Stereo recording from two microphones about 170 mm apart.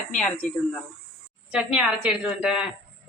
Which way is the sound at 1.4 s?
5° right (ahead or behind).